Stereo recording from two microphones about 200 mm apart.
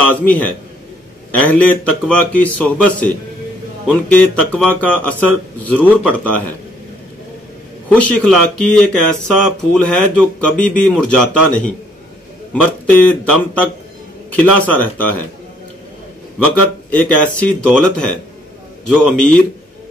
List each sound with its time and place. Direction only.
0.0 s a man's voice: 5° left (ahead or behind)
7.9 s a man's voice: 5° left (ahead or behind)
16.3 s speech: 10° left (ahead or behind)